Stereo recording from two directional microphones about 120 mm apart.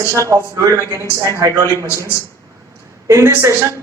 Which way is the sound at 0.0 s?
25° right (ahead or behind).